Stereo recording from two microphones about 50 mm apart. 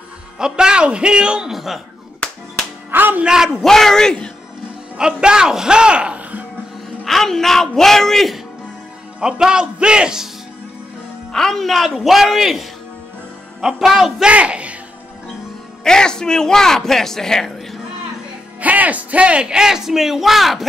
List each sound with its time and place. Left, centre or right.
0.4 s a man's voice: centre
1.5 s a man's voice: centre
2.9 s music: right
3.3 s speech: centre
3.6 s a man's voice: centre
4.9 s speech: centre
7.1 s a man's voice: centre
9.2 s speech: centre
11.3 s a man's voice: centre
14.2 s speech: right
15.8 s a man's voice: centre
18.6 s speech: right; by 20.6 s centre